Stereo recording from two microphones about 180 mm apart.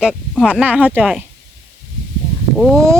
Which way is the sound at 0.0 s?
5° left (ahead or behind).